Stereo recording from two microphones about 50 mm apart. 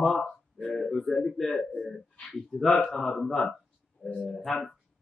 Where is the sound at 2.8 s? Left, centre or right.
Centre.